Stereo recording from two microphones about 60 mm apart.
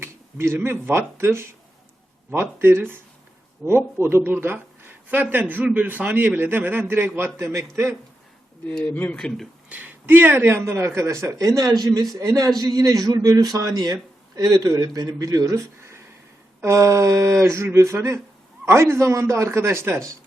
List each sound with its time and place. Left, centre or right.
0.0 s a man's voice: right
5.1 s a man's voice: right
7.3 s a man's voice: right
8.8 s speech: left
9.1 s speech: centre
9.6 s a man's voice: right
12.1 s a man's voice: right
12.5 s a man's voice: right
13.6 s a man's voice: right
16.6 s a sound: right
17.3 s a man's voice: right